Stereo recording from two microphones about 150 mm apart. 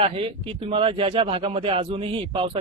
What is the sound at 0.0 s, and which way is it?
Speech, 40° right (ahead or behind).